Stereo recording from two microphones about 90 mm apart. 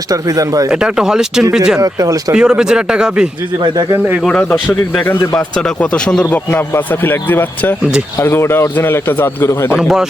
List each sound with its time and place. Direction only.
0.1 s speech: 40° right (ahead or behind)
0.7 s speech: 10° right (ahead or behind)
1.8 s speech: 40° right (ahead or behind)
2.3 s speech: 10° right (ahead or behind)
5.5 s a man's voice: 10° left (ahead or behind); by 9.7 s 30° left (ahead or behind)
9.7 s a man's voice: 5° right (ahead or behind)